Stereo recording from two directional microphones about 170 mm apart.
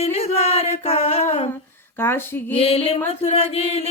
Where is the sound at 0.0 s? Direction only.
35° left (ahead or behind).